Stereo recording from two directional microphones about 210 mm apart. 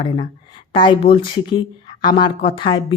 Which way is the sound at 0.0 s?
25° left (ahead or behind).